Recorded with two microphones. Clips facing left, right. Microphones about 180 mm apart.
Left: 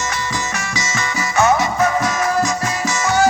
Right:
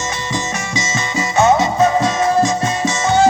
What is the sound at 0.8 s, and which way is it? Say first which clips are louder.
Music: right 3 dB; 25° right (ahead or behind).